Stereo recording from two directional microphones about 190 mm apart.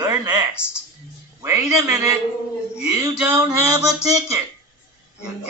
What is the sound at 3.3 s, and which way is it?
Speech, 20° right (ahead or behind).